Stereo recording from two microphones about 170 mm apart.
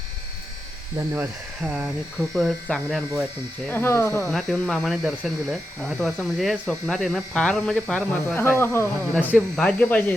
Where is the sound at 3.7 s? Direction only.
15° left (ahead or behind).